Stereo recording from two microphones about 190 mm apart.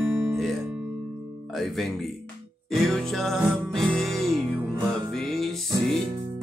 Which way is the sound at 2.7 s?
Centre (ahead or behind).